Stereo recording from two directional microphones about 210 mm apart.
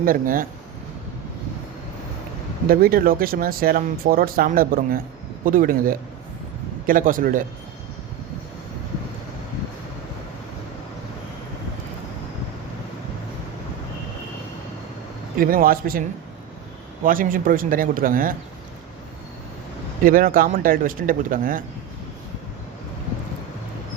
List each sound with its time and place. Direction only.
0.0 s speech: 40° right (ahead or behind)
2.6 s speech: 45° right (ahead or behind)
15.4 s speech: 40° right (ahead or behind)
20.1 s speech: 40° right (ahead or behind)